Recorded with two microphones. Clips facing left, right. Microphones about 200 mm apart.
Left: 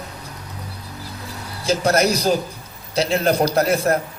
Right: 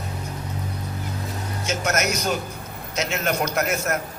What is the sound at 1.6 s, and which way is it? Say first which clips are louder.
A man's voice: left 7 dB; 35° left (ahead or behind).